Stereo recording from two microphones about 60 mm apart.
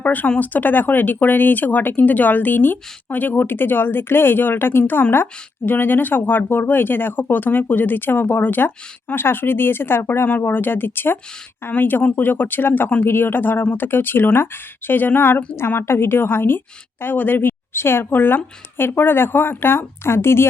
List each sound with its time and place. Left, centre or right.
0.0 s speech: left
10.2 s speech: left